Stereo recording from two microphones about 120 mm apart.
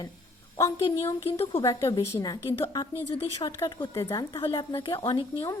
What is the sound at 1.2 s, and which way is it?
Speech, 55° left (ahead or behind).